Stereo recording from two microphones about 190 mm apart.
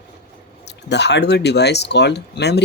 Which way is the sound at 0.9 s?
65° left (ahead or behind).